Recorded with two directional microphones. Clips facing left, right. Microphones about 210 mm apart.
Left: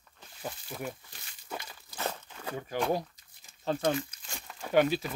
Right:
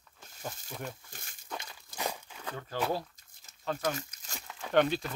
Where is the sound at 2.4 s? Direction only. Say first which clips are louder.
Left 3 dB; 15° left (ahead or behind).